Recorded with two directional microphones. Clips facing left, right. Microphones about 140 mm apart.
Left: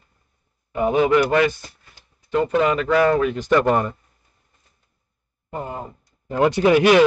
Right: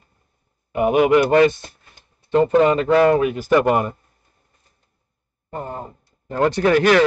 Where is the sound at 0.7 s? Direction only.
15° right (ahead or behind).